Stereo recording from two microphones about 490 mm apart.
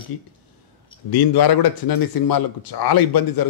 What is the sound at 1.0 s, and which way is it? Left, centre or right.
Speech, left.